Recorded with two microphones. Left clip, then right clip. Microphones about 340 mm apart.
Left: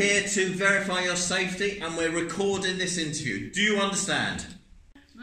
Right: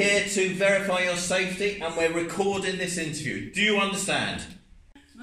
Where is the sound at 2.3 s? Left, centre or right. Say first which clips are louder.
Right 1 dB; centre.